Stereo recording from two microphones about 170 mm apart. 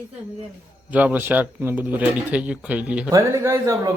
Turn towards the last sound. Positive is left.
turn(degrees=-15)  # may be behind; listen again after turning